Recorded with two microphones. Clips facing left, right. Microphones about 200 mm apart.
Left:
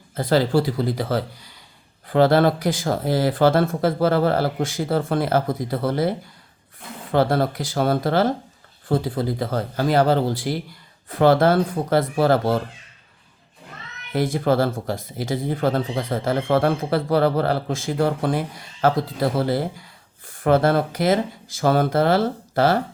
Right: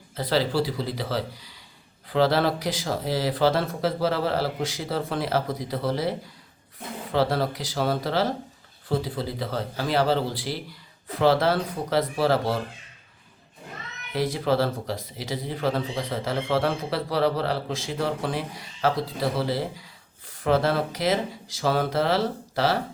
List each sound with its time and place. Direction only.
0.2 s speech: 50° left (ahead or behind)
14.1 s speech: 50° left (ahead or behind)